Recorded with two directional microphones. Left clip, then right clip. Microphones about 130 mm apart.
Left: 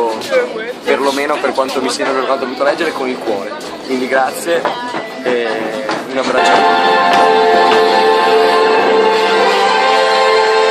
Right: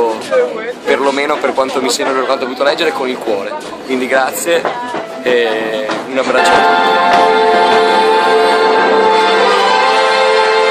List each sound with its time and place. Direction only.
0.8 s a man's voice: 20° right (ahead or behind)
4.1 s a man's voice: 15° right (ahead or behind)
6.4 s music: 25° left (ahead or behind)